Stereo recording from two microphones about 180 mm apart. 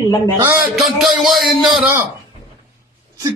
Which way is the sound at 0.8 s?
Centre (ahead or behind).